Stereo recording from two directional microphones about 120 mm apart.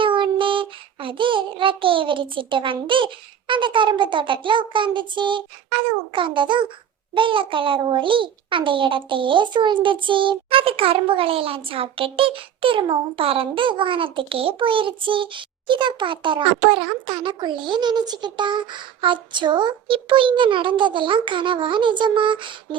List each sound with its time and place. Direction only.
0.0 s child singing: 45° right (ahead or behind)
6.1 s a child's voice: 45° right (ahead or behind)